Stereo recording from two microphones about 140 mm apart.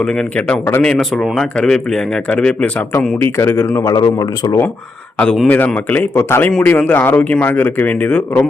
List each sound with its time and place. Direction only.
0.0 s a man's voice: 5° left (ahead or behind)
3.9 s speech: 30° left (ahead or behind)
5.2 s speech: 10° left (ahead or behind)